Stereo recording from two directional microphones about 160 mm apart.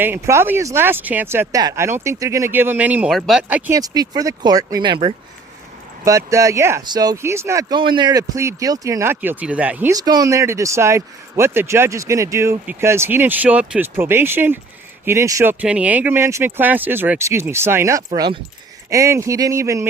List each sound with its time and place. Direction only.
0.0 s speech: 15° right (ahead or behind)
3.7 s speech: 25° right (ahead or behind)
7.8 s speech: 30° right (ahead or behind); by 9.9 s 10° right (ahead or behind)
9.9 s speech: 25° right (ahead or behind)
15.6 s speech: 5° right (ahead or behind)